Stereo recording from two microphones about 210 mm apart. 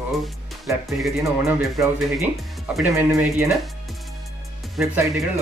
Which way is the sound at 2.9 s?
10° right (ahead or behind).